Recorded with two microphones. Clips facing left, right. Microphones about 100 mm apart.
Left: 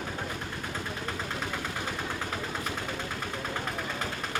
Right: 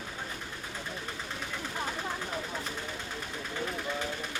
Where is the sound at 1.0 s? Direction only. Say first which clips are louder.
Left 5 dB; 75° left (ahead or behind).